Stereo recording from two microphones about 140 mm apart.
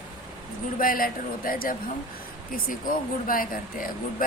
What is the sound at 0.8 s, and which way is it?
Speech, 90° left.